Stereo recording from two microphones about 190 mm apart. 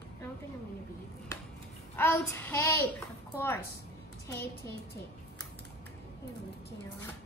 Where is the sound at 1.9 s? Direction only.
10° left (ahead or behind).